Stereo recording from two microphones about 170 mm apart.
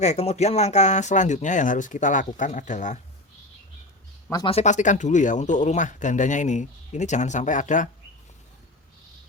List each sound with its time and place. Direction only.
0.0 s speech: 40° left (ahead or behind)
4.4 s speech: 40° left (ahead or behind)